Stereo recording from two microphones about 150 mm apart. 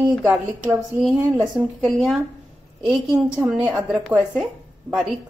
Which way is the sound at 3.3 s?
5° right (ahead or behind).